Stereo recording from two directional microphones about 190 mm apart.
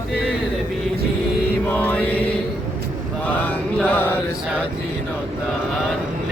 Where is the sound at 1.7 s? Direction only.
10° left (ahead or behind).